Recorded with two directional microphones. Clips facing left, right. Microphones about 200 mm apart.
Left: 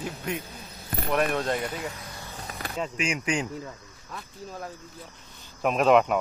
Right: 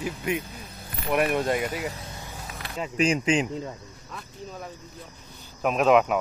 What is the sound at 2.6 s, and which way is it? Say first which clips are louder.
Vehicle: left 3 dB; 45° left (ahead or behind).